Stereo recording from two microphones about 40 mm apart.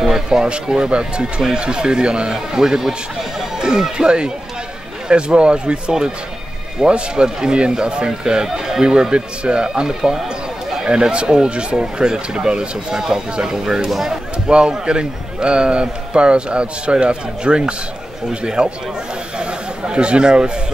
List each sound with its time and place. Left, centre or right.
0.0 s a man's voice: centre
13.8 s speech: centre
14.5 s a man's voice: right
19.3 s a sound: right